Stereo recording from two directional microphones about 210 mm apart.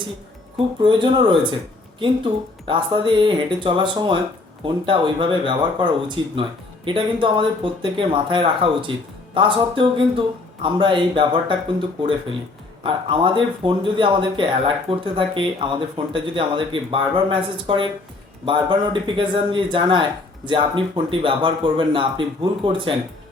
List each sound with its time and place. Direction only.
0.8 s speech: 25° right (ahead or behind)
12.8 s speech: 25° right (ahead or behind)